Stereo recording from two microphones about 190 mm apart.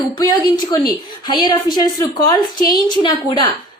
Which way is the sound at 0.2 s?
20° left (ahead or behind).